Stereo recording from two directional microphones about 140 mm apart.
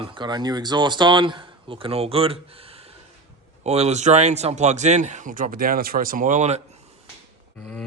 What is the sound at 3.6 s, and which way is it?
Speech, 50° right (ahead or behind).